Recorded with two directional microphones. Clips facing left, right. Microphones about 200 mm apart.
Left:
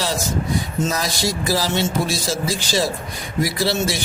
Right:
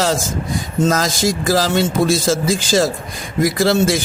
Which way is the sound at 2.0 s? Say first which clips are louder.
Right 7 dB; 50° right (ahead or behind).